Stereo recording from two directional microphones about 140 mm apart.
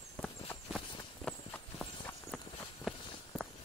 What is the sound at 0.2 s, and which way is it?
Walk, 10° left (ahead or behind).